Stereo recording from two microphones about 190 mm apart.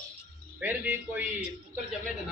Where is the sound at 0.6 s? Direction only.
10° right (ahead or behind).